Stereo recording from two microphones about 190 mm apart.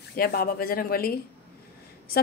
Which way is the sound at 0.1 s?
55° left (ahead or behind).